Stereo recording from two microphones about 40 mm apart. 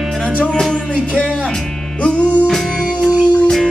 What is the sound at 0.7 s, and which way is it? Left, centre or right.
Music, left.